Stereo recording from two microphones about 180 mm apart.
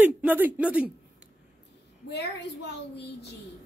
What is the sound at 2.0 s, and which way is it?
A child's voice, 70° left (ahead or behind).